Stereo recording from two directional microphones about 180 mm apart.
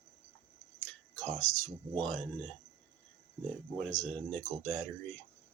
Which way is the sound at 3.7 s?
5° left (ahead or behind).